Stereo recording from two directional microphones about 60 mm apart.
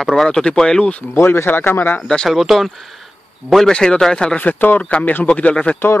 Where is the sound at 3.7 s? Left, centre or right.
Centre.